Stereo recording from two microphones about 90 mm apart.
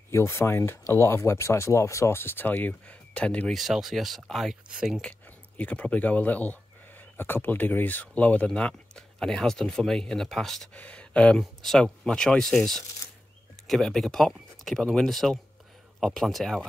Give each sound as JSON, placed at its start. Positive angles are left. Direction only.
{"t": 0.1, "sound": "speech", "side_deg": 30}
{"t": 3.5, "sound": "speech", "side_deg": -5}
{"t": 5.2, "sound": "speech", "side_deg": 15}